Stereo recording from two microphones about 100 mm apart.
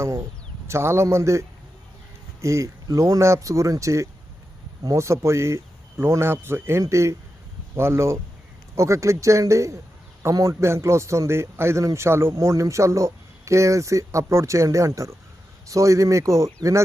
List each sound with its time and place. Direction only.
0.7 s speech: 25° right (ahead or behind)